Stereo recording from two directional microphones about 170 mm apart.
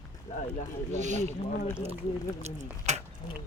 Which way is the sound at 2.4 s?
40° right (ahead or behind).